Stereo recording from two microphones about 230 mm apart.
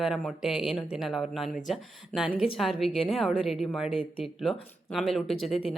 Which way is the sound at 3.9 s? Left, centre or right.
Left.